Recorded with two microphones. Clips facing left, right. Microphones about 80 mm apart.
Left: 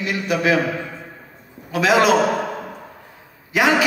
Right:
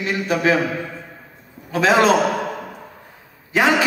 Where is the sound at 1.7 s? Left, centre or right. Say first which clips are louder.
Right 1 dB; right.